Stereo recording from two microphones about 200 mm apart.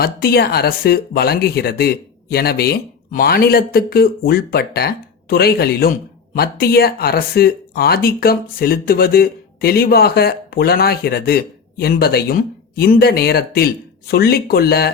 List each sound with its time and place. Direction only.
0.0 s speech: 50° left (ahead or behind)